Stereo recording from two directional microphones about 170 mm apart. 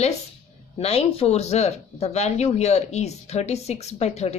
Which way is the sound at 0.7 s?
35° left (ahead or behind).